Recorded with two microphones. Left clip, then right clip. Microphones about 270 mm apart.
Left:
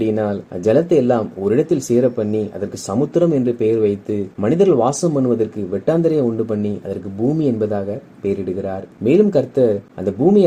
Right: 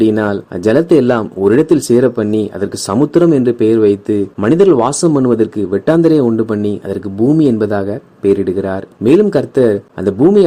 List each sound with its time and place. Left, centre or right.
0.1 s speech: right